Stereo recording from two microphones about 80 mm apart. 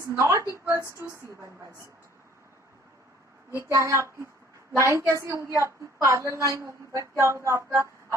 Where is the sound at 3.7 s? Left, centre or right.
Right.